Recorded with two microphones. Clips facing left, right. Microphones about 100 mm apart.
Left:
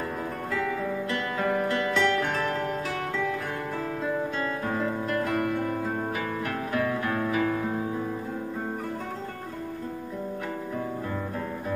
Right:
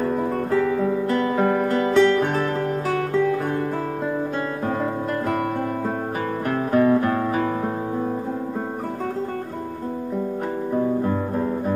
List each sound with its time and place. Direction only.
1.0 s music: 40° right (ahead or behind)
6.7 s guitar: 40° right (ahead or behind)